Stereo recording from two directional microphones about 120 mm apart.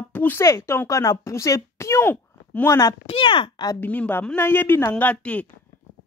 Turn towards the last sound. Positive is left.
turn(degrees=10)  # may be behind; listen again after turning